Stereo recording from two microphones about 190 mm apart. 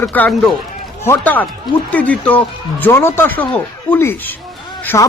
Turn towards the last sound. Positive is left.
turn(degrees=15)  # may be behind; listen again after turning